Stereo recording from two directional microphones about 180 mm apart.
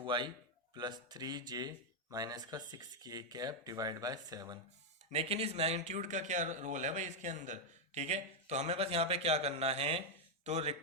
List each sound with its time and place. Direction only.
0.0 s a man's voice: 25° right (ahead or behind)
5.1 s a man's voice: 35° right (ahead or behind)